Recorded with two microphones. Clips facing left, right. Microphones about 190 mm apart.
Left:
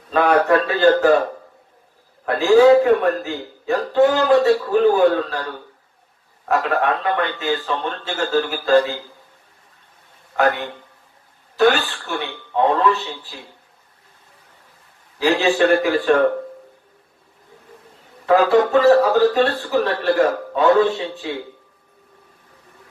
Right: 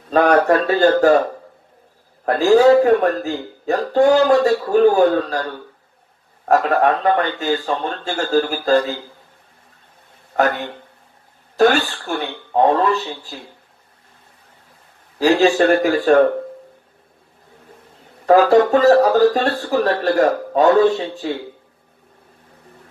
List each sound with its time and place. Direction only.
0.1 s speech: 45° right (ahead or behind)
2.2 s speech: 45° right (ahead or behind)
11.5 s speech: 40° right (ahead or behind)
15.2 s a man's voice: 40° right (ahead or behind)
18.3 s speech: 45° right (ahead or behind)